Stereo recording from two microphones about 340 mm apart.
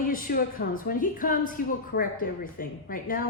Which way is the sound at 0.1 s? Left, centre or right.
Left.